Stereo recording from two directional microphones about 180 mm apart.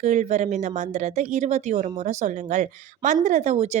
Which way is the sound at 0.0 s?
40° right (ahead or behind).